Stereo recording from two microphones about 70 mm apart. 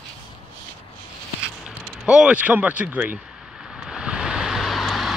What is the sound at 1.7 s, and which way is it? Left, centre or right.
Speech, centre.